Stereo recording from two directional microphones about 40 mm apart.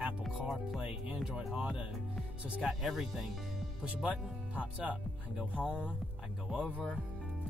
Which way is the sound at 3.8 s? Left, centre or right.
Right.